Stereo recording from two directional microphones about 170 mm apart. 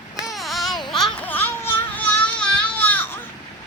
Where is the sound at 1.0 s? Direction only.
10° left (ahead or behind).